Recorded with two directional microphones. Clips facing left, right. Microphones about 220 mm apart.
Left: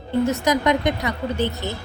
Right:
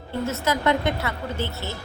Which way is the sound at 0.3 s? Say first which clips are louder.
Even; 15° left (ahead or behind).